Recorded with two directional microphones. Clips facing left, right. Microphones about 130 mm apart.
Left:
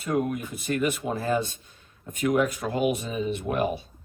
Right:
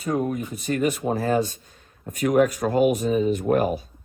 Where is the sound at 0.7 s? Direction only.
40° right (ahead or behind).